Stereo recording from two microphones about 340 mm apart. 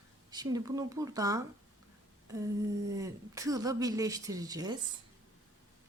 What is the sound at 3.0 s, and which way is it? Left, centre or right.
A woman's voice, centre.